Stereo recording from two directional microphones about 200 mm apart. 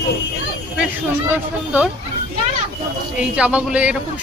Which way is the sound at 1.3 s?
5° right (ahead or behind).